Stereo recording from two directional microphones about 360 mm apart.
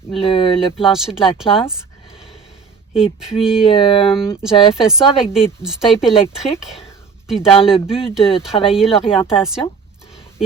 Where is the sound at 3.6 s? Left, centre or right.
Centre.